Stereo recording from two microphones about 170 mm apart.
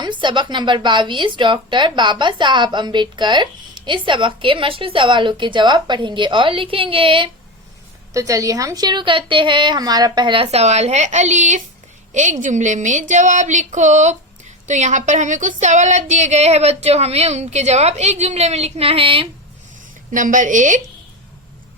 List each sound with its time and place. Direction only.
0.0 s a woman's voice: 25° right (ahead or behind)
8.1 s a woman's voice: 20° right (ahead or behind)
20.1 s speech: 50° right (ahead or behind)